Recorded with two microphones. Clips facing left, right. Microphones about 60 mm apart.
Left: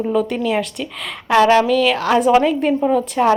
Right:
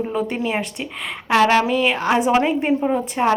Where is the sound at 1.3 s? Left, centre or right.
Centre.